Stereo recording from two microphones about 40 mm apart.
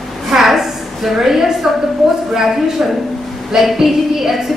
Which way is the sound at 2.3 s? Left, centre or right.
Centre.